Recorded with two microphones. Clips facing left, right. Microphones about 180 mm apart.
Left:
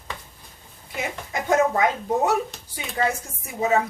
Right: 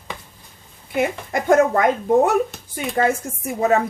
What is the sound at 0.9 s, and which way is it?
Speech, 55° right (ahead or behind).